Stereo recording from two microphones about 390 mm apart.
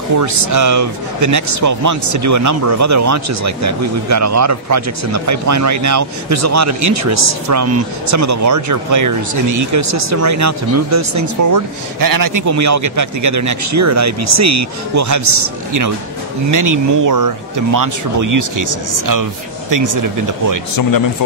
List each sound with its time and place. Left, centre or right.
0.2 s speech: right